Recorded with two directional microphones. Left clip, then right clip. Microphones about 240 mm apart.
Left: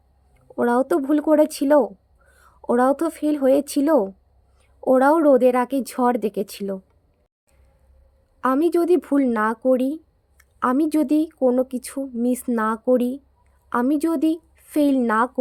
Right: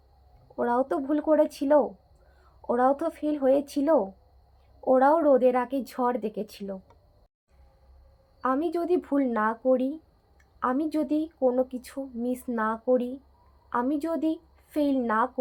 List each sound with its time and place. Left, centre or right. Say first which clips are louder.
0.5 s speech: left 6 dB; left
8.4 s speech: left 8 dB; left